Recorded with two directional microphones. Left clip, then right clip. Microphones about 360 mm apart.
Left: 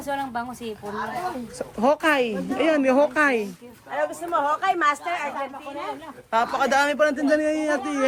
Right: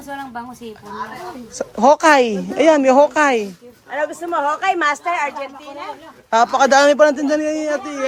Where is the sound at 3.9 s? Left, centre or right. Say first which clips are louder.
Right 4 dB; right.